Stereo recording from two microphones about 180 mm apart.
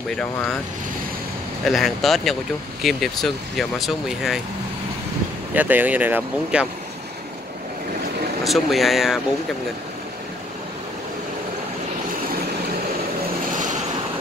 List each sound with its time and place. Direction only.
0.1 s speech: 5° left (ahead or behind)
1.7 s speech: centre (ahead or behind)
5.5 s speech: 10° right (ahead or behind)
8.5 s speech: centre (ahead or behind)
13.5 s vehicle: 45° right (ahead or behind)